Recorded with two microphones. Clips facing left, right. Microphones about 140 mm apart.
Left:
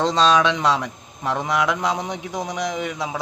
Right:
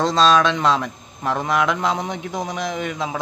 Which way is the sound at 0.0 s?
15° left (ahead or behind).